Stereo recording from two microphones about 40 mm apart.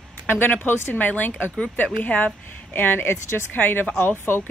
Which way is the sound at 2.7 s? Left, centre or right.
Left.